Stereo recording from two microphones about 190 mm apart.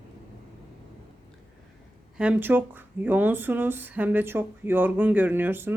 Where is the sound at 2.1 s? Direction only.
10° right (ahead or behind).